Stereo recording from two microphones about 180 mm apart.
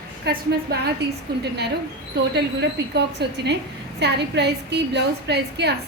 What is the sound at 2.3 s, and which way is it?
A woman's voice, 65° right (ahead or behind).